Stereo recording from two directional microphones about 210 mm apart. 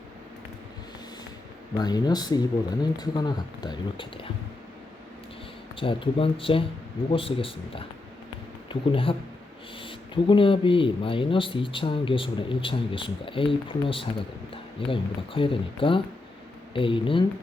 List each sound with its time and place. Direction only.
1.7 s speech: 20° left (ahead or behind)
5.8 s speech: 25° left (ahead or behind)